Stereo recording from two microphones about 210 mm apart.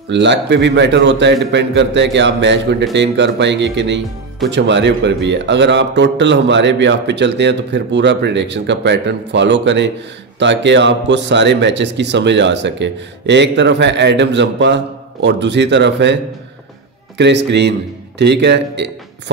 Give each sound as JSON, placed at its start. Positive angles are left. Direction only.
{"t": 0.1, "sound": "a man's voice", "side_deg": -55}
{"t": 17.2, "sound": "a man's voice", "side_deg": -55}